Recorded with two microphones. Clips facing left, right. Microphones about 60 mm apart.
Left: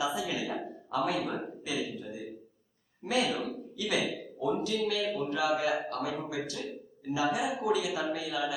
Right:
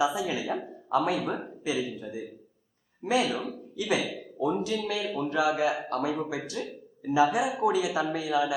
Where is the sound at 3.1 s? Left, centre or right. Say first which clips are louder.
Right 3 dB; centre.